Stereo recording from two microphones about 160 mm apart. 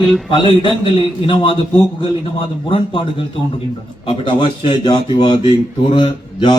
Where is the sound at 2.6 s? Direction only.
30° left (ahead or behind).